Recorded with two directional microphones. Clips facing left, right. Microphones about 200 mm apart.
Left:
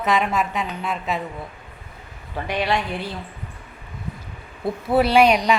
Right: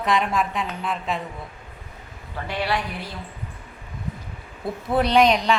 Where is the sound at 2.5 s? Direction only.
20° left (ahead or behind).